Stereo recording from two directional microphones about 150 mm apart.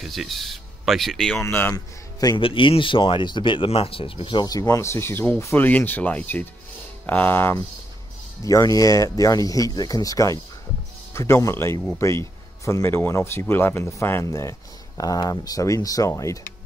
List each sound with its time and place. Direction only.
0.0 s speech: centre (ahead or behind)
2.1 s speech: 25° left (ahead or behind)
2.4 s speech: 35° left (ahead or behind); by 16.5 s 20° left (ahead or behind)